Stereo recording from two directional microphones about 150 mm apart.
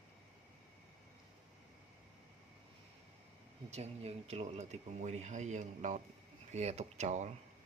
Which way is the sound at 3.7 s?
45° right (ahead or behind).